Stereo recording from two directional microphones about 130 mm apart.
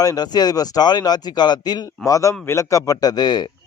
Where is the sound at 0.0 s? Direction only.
30° left (ahead or behind).